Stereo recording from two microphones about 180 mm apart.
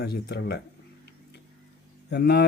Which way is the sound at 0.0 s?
65° left (ahead or behind).